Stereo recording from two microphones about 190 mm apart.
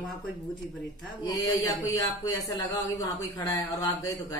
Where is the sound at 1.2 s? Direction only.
20° left (ahead or behind).